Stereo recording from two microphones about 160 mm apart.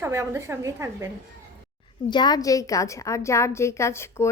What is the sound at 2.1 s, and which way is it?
A woman's voice, 25° left (ahead or behind).